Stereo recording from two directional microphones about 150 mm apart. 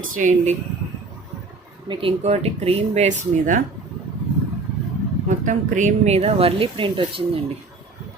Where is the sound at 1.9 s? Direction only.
40° right (ahead or behind); by 3.6 s 55° right (ahead or behind).